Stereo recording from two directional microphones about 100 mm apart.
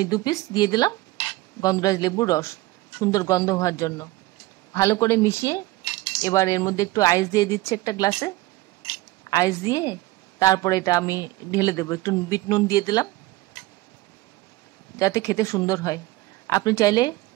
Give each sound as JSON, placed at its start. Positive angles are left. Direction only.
{"t": 0.0, "sound": "a woman's voice", "side_deg": 40}
{"t": 15.0, "sound": "speech", "side_deg": 35}